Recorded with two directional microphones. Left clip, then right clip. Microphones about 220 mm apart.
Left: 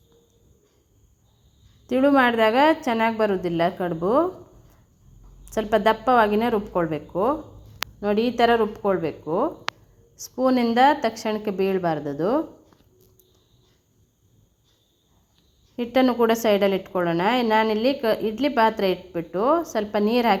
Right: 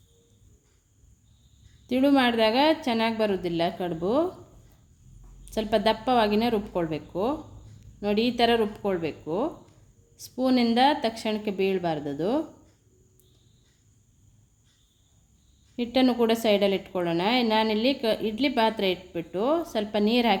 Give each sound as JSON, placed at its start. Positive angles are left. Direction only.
{"t": 1.9, "sound": "a woman's voice", "side_deg": 0}
{"t": 5.5, "sound": "a woman's voice", "side_deg": 5}
{"t": 15.7, "sound": "a woman's voice", "side_deg": 0}